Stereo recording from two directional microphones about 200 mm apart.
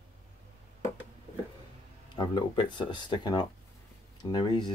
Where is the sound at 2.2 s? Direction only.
20° left (ahead or behind).